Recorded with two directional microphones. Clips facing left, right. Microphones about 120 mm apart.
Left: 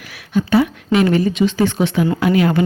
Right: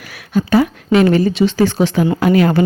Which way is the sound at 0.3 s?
40° right (ahead or behind).